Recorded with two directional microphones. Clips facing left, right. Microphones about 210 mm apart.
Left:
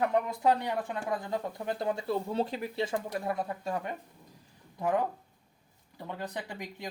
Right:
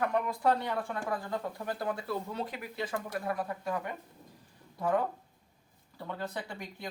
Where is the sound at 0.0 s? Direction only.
20° left (ahead or behind).